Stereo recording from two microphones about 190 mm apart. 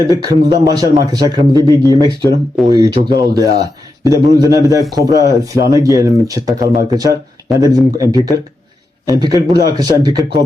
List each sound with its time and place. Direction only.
0.1 s a man's voice: 20° right (ahead or behind)